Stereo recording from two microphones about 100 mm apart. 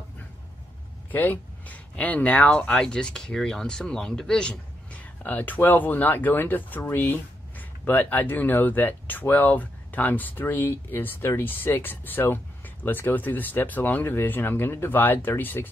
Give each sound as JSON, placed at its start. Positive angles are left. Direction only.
{"t": 1.1, "sound": "speech", "side_deg": 20}